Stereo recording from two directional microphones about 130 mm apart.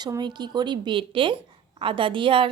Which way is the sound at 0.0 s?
35° right (ahead or behind).